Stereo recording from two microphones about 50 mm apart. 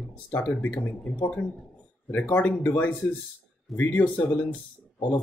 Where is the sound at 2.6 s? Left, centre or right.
Left.